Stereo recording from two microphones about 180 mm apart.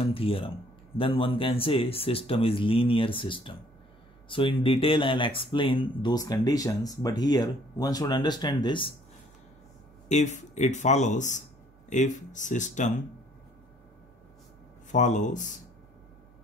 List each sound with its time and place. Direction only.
0.0 s speech: 30° left (ahead or behind)
10.0 s speech: 40° left (ahead or behind)
14.9 s speech: 45° left (ahead or behind)